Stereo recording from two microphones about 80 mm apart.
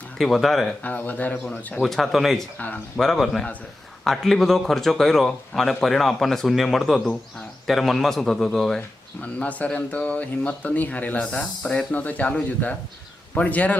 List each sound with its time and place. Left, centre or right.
0.2 s a man's voice: centre
0.8 s a man's voice: left
9.2 s speech: centre